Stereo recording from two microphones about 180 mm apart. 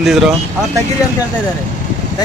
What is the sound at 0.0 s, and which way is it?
Speech, centre (ahead or behind).